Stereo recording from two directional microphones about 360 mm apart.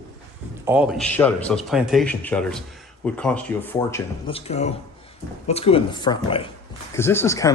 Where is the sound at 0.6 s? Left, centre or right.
Centre.